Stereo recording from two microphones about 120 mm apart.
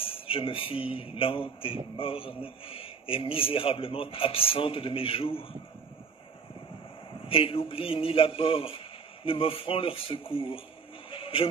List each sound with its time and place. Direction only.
0.0 s speech: 50° left (ahead or behind)
7.2 s speech: 50° left (ahead or behind)
11.1 s a sound: 50° left (ahead or behind)